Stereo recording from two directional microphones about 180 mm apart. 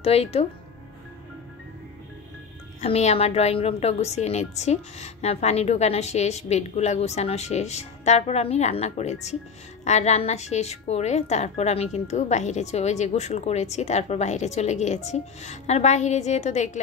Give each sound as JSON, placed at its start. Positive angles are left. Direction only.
{"t": 0.0, "sound": "a woman's voice", "side_deg": 35}
{"t": 2.8, "sound": "a woman's voice", "side_deg": 35}